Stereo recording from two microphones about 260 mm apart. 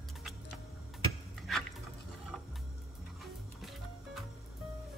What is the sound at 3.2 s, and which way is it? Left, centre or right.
Music, centre.